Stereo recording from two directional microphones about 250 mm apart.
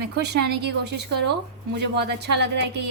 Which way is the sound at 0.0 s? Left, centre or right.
Right.